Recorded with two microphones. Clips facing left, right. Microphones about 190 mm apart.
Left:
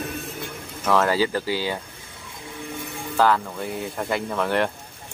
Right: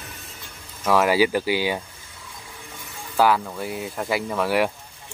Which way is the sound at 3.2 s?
10° right (ahead or behind).